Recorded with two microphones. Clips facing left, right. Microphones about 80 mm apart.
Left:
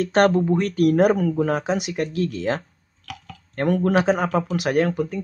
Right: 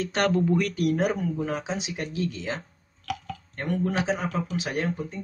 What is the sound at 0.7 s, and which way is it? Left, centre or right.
Speech, left.